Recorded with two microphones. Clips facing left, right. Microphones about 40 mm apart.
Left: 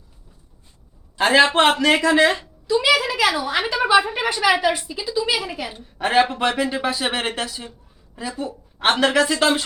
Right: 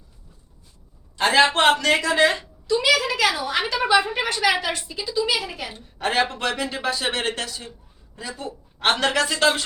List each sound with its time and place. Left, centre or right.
1.1 s a man's voice: centre